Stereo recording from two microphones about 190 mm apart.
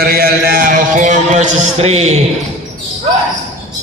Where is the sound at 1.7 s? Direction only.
35° right (ahead or behind).